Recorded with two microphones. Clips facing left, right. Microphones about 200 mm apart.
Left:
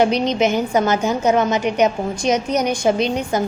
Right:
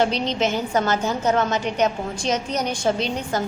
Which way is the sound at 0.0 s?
15° left (ahead or behind).